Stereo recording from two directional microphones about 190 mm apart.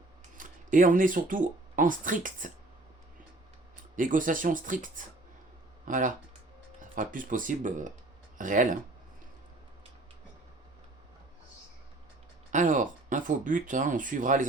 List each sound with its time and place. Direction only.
0.3 s speech: 45° right (ahead or behind)
3.9 s speech: 45° right (ahead or behind)
12.5 s speech: 40° right (ahead or behind)